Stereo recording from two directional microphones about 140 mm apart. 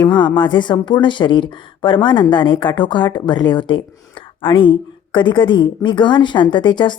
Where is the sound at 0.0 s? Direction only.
35° left (ahead or behind).